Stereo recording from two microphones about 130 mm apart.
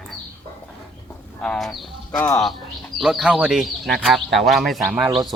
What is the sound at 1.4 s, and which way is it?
Speech, 5° left (ahead or behind).